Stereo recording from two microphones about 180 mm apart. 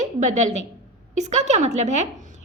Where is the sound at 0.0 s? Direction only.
45° right (ahead or behind).